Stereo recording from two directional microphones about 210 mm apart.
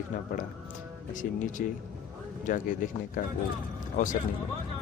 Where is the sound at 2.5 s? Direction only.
40° left (ahead or behind).